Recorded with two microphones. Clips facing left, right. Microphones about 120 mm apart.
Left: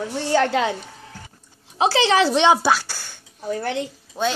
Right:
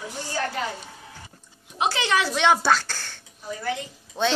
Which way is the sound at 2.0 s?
30° left (ahead or behind).